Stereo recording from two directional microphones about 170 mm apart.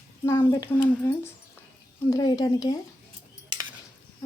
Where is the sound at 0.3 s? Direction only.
15° left (ahead or behind).